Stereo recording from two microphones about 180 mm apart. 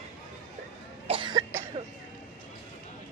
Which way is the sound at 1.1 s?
25° right (ahead or behind).